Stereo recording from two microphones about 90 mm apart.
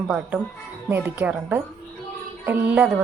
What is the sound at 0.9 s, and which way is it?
A woman's voice, 20° right (ahead or behind).